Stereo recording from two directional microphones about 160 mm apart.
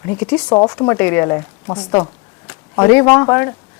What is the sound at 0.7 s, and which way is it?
A woman's voice, 10° left (ahead or behind).